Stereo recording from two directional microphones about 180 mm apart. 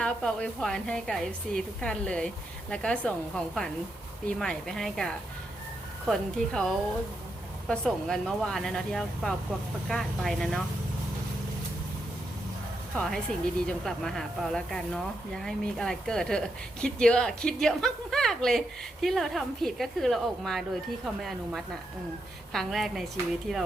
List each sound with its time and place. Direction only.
0.0 s a woman's voice: 5° left (ahead or behind)
7.7 s a woman's voice: centre (ahead or behind)
12.9 s a woman's voice: 5° left (ahead or behind)